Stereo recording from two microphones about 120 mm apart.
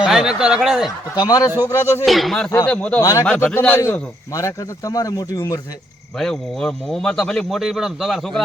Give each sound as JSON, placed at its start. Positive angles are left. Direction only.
{"t": 0.0, "sound": "speech", "side_deg": -5}
{"t": 1.1, "sound": "a man's voice", "side_deg": 35}
{"t": 2.0, "sound": "speech", "side_deg": 0}
{"t": 3.0, "sound": "a man's voice", "side_deg": 30}
{"t": 3.2, "sound": "a man's voice", "side_deg": 15}
{"t": 6.1, "sound": "speech", "side_deg": 5}